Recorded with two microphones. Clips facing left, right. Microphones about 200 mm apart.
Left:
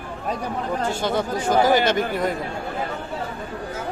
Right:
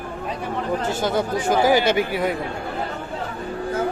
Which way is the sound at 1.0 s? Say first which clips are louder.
Right 1 dB; 5° right (ahead or behind).